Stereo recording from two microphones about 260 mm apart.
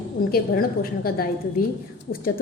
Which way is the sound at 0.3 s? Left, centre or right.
Left.